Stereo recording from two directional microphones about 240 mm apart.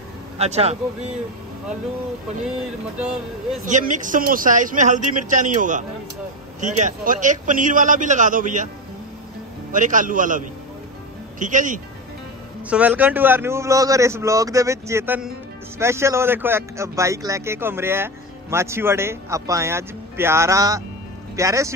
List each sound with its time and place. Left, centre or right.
0.4 s speech: right
3.6 s a man's voice: right
9.7 s a man's voice: right
12.6 s speech: centre